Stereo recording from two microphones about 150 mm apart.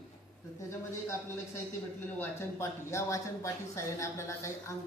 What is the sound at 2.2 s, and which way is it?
A woman's voice, 20° left (ahead or behind).